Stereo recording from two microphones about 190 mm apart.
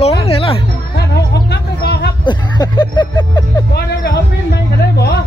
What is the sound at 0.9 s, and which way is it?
Music, 60° left (ahead or behind).